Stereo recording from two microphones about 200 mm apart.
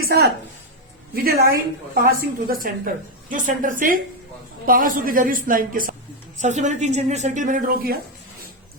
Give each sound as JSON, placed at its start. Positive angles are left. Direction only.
{"t": 0.0, "sound": "a woman's voice", "side_deg": -50}